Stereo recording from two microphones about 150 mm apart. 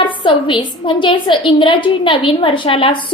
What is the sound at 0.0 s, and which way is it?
A woman's voice, 35° left (ahead or behind).